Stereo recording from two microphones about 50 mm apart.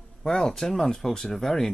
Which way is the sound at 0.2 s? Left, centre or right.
Centre.